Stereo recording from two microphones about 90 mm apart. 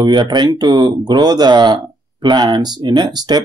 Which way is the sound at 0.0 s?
55° right (ahead or behind).